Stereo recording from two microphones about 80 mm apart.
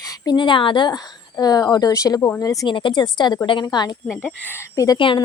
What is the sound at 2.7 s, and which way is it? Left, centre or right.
Speech, left.